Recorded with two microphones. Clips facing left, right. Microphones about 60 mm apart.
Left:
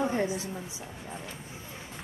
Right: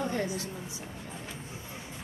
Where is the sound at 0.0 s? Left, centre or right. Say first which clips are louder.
Left 3 dB; centre.